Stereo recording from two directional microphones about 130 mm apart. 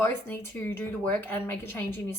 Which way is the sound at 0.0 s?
15° left (ahead or behind).